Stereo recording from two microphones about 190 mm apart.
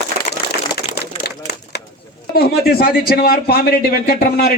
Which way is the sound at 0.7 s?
55° left (ahead or behind).